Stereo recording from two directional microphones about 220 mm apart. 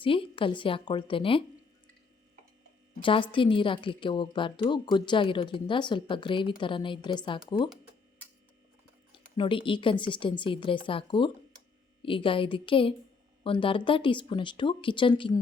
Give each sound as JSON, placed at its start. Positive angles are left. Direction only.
{"t": 0.0, "sound": "a woman's voice", "side_deg": 25}
{"t": 3.0, "sound": "a woman's voice", "side_deg": 20}
{"t": 9.4, "sound": "a woman's voice", "side_deg": 25}